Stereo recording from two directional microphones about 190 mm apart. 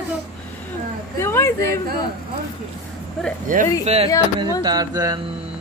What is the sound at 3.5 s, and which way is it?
Speech, 45° right (ahead or behind).